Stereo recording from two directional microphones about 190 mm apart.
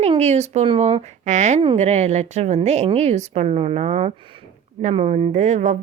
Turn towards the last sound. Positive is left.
turn(degrees=-40)  # may be behind; listen again after turning